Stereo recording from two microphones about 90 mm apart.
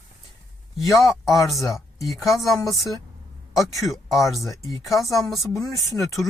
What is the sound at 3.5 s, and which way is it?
Speech, centre (ahead or behind).